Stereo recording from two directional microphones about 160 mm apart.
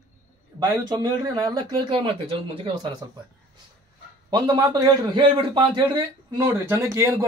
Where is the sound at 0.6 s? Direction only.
25° right (ahead or behind).